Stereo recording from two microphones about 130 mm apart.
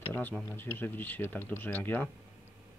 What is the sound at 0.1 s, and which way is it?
Speech, 15° left (ahead or behind).